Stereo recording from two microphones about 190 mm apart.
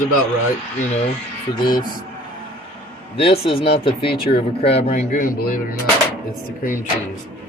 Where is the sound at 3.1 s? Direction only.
30° left (ahead or behind); by 5.7 s 45° left (ahead or behind).